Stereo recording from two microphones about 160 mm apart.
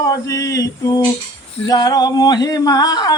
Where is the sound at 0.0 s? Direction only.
20° left (ahead or behind).